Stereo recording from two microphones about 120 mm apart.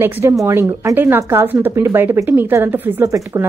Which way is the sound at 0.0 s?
20° right (ahead or behind).